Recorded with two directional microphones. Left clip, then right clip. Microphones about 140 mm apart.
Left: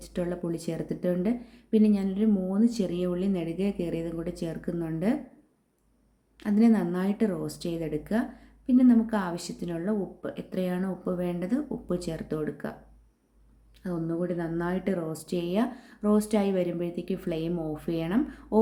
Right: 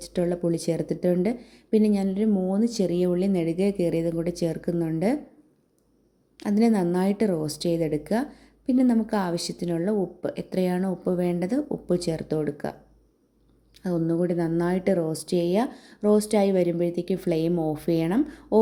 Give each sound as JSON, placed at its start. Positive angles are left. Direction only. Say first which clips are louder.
{"t": 0.0, "sound": "a woman's voice", "louder": "right 6 dB", "side_deg": -35}
{"t": 6.3, "sound": "a woman's voice", "louder": "right 2 dB", "side_deg": -35}
{"t": 13.8, "sound": "a woman's voice", "louder": "right 6 dB", "side_deg": -40}